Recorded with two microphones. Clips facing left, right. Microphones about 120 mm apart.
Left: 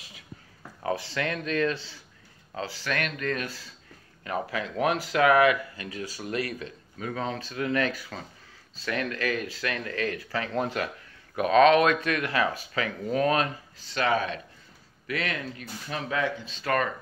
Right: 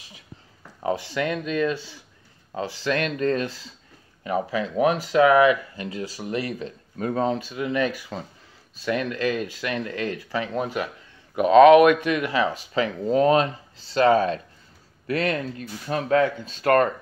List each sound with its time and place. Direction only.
0.8 s speech: 15° right (ahead or behind)
7.0 s speech: 35° right (ahead or behind)
7.3 s speech: 15° right (ahead or behind)
12.7 s speech: 30° right (ahead or behind); by 16.9 s 50° right (ahead or behind)